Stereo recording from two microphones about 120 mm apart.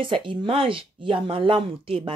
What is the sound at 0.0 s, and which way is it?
Speech, 45° right (ahead or behind).